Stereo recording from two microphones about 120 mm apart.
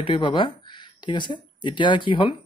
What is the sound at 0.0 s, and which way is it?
Speech, 45° left (ahead or behind).